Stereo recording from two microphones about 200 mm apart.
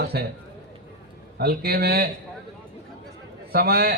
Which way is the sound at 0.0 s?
55° right (ahead or behind).